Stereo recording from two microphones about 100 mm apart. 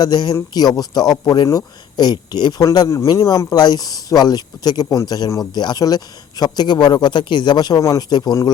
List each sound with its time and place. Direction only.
0.0 s speech: 45° left (ahead or behind)